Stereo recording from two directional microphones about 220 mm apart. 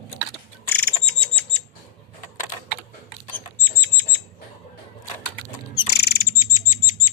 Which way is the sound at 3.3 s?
10° left (ahead or behind).